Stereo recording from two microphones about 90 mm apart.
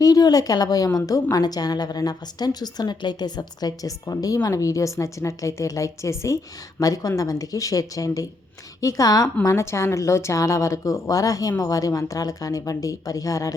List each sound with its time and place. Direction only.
0.0 s a woman's voice: 45° left (ahead or behind)